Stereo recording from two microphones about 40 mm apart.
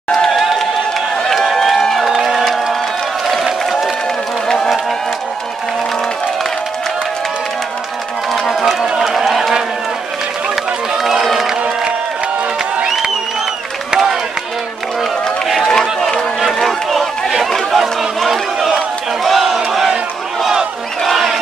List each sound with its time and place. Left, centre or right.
0.3 s a sound: centre
2.0 s crowd: centre
8.5 s run: centre
8.8 s run: centre
9.1 s run: centre
11.0 s run: centre
11.3 s crowd: centre
15.4 s run: centre
17.5 s chatter: centre
19.2 s battle cry: centre
21.0 s a sound: centre